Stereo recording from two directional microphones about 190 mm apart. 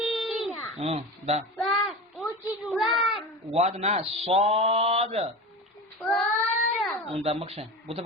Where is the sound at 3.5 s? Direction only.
35° right (ahead or behind).